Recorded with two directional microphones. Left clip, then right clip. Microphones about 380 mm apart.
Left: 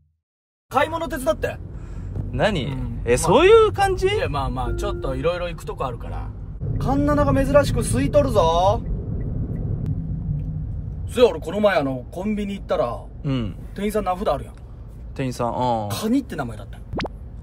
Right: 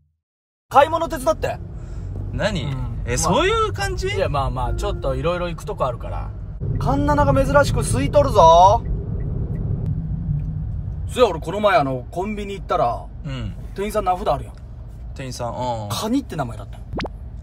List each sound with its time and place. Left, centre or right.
0.7 s speech: centre
2.0 s speech: centre
4.2 s speech: centre
11.1 s speech: centre
13.2 s speech: centre
13.7 s speech: centre
15.1 s speech: centre
15.9 s speech: centre